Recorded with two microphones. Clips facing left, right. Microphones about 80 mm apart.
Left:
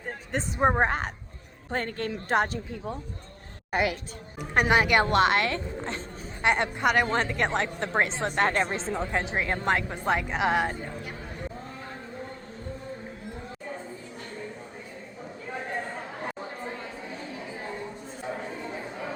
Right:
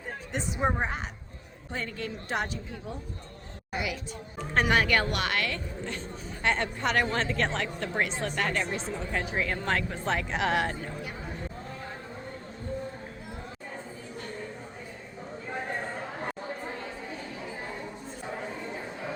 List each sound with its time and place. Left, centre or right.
0.3 s speech: left
0.8 s a woman's voice: left
4.7 s speech: centre; by 6.0 s left
6.4 s speech: centre; by 9.0 s left
9.1 s a woman's voice: left; by 10.7 s centre